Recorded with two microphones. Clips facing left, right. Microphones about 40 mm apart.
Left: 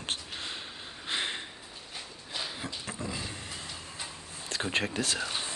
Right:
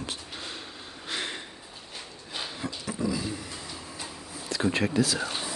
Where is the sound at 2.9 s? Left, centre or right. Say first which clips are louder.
Right 10 dB; left.